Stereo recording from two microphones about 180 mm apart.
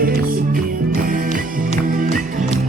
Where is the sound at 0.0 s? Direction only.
50° right (ahead or behind).